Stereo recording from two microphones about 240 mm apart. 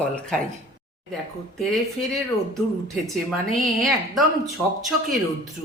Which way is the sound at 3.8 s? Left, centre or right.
Centre.